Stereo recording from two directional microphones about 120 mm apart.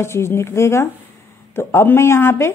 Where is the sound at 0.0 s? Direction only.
20° left (ahead or behind).